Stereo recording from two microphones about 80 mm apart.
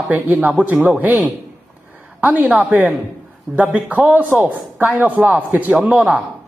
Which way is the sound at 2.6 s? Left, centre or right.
Right.